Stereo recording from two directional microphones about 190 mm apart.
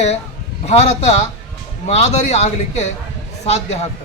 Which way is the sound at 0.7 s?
35° left (ahead or behind).